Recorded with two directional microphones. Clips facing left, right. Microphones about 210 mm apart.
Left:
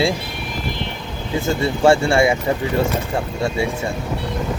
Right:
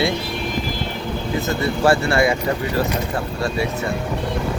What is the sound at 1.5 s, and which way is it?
Speech, 25° left (ahead or behind).